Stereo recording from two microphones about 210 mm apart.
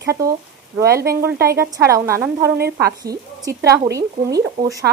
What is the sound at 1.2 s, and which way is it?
Speech, 15° right (ahead or behind).